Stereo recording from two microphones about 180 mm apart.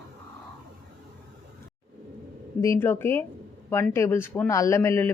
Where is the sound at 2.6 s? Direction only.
15° left (ahead or behind).